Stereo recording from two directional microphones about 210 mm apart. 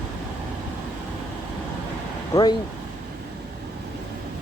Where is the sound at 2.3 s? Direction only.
15° left (ahead or behind).